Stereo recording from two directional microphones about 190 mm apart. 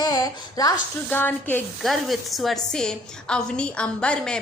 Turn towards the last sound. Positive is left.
turn(degrees=5)  # may be behind; listen again after turning